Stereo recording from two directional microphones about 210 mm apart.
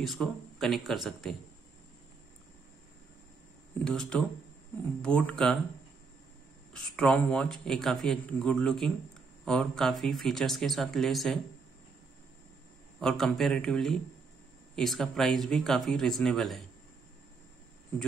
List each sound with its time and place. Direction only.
0.0 s speech: centre (ahead or behind)
3.8 s speech: 5° left (ahead or behind)
6.7 s speech: 5° left (ahead or behind)
13.0 s speech: centre (ahead or behind)